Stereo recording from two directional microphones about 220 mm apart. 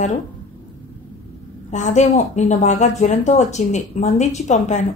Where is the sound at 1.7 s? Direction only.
35° left (ahead or behind).